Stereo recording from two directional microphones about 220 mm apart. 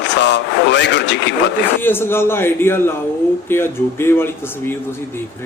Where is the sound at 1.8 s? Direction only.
10° left (ahead or behind).